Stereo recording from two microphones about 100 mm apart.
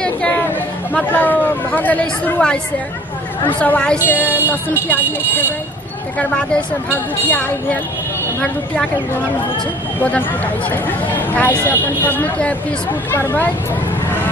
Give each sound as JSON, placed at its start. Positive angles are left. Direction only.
{"t": 0.9, "sound": "speech", "side_deg": 15}
{"t": 6.1, "sound": "speech", "side_deg": 10}
{"t": 9.9, "sound": "speech", "side_deg": 15}